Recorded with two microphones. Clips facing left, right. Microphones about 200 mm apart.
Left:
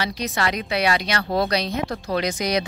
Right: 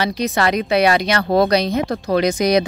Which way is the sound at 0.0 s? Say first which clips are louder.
Right 6 dB; 50° right (ahead or behind).